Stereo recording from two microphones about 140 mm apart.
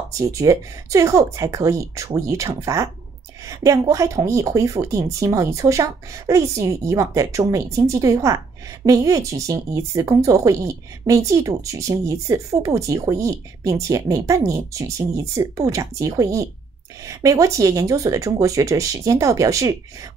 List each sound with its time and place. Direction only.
0.2 s speech: 25° right (ahead or behind)